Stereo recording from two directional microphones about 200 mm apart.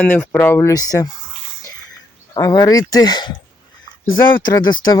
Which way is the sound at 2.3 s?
20° left (ahead or behind).